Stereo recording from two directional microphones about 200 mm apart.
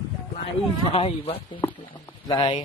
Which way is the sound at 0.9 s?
30° left (ahead or behind).